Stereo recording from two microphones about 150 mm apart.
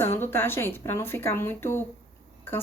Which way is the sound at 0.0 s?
15° left (ahead or behind).